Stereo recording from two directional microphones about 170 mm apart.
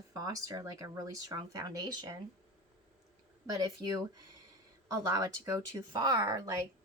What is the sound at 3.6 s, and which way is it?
Speech, 20° right (ahead or behind).